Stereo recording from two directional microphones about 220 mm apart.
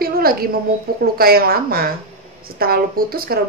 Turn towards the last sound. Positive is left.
turn(degrees=-40)  # may be behind; listen again after turning